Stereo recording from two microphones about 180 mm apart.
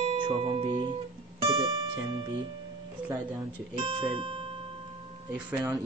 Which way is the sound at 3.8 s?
30° right (ahead or behind).